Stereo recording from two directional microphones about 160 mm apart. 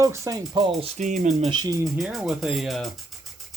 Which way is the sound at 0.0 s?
20° right (ahead or behind).